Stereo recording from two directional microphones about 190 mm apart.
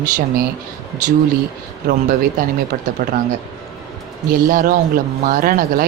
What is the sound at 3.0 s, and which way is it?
Speech, 45° right (ahead or behind).